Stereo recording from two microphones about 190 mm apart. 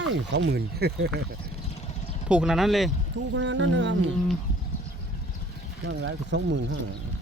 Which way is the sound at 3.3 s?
70° right (ahead or behind).